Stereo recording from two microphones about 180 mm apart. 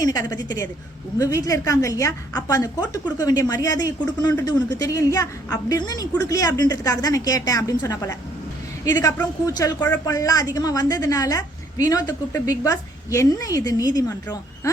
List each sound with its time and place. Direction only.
0.0 s a woman's voice: 20° left (ahead or behind)